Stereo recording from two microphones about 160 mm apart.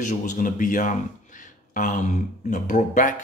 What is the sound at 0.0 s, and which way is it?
Speech, 50° left (ahead or behind).